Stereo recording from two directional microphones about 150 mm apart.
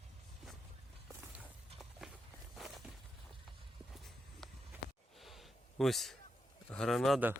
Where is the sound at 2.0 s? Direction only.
5° right (ahead or behind).